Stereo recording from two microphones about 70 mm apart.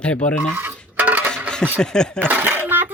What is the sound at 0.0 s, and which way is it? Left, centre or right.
Speech, centre.